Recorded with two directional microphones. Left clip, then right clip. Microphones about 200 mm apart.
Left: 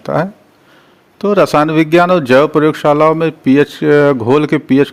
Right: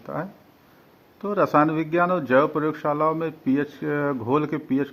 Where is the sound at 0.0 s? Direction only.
55° left (ahead or behind).